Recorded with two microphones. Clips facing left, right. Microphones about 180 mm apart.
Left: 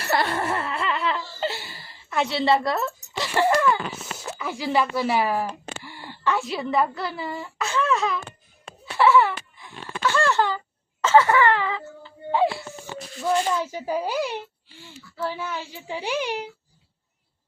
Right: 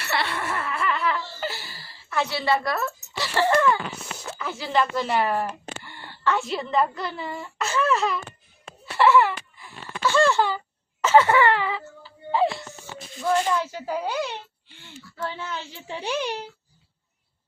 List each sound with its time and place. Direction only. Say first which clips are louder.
0.0 s laughter: left 4 dB; 45° left (ahead or behind); by 3.7 s 20° left (ahead or behind)
4.3 s speech: left 3 dB; 15° left (ahead or behind)
5.8 s a sound: even; 10° left (ahead or behind)
6.4 s speech: even; 5° left (ahead or behind)
9.0 s wail: even; centre (ahead or behind)
11.0 s a sound: even; 15° right (ahead or behind)
12.4 s music: left 1 dB; 5° left (ahead or behind)
13.6 s speech: left 2 dB; 15° left (ahead or behind)